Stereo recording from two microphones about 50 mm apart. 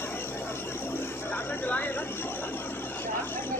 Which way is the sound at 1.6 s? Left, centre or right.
Left.